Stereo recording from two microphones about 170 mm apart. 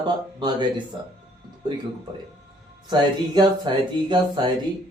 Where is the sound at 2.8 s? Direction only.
25° right (ahead or behind).